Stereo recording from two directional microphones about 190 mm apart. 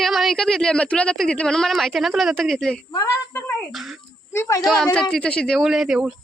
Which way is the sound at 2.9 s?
15° left (ahead or behind).